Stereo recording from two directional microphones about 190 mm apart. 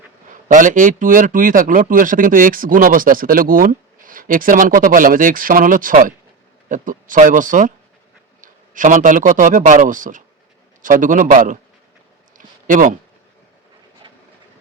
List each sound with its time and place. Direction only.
0.4 s a man's voice: 40° right (ahead or behind)
12.6 s speech: 45° right (ahead or behind)
14.0 s train: 25° right (ahead or behind)